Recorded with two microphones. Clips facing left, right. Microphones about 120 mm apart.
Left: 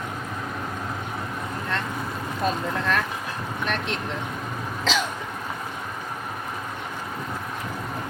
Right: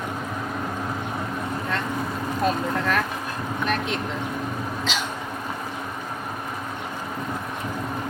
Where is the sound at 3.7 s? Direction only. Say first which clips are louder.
Right 2 dB; 5° right (ahead or behind).